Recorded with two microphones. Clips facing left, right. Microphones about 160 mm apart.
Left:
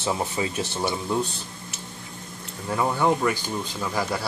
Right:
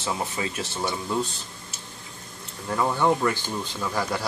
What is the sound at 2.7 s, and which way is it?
Speech, 10° left (ahead or behind).